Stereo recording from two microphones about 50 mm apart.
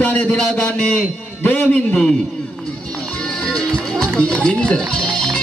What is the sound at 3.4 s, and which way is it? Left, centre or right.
Music, centre.